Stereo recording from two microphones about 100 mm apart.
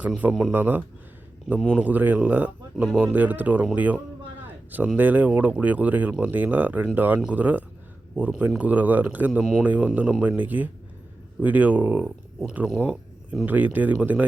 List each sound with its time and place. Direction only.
0.2 s speech: 5° right (ahead or behind)
0.5 s speech: 20° right (ahead or behind)